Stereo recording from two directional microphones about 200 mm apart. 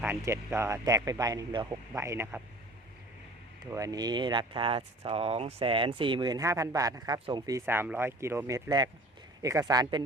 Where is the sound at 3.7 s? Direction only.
15° right (ahead or behind).